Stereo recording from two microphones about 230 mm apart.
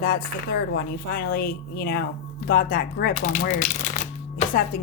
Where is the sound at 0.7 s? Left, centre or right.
Left.